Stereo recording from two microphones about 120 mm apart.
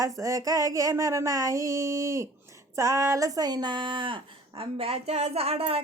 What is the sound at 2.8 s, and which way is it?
A woman's voice, 25° right (ahead or behind).